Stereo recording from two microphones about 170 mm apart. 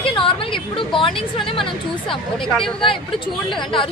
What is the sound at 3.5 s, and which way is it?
Speech, 30° left (ahead or behind).